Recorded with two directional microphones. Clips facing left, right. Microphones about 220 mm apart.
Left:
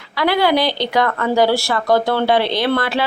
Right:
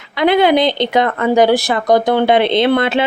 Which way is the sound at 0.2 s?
20° right (ahead or behind).